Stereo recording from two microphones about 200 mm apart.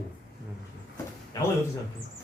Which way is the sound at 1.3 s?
15° left (ahead or behind).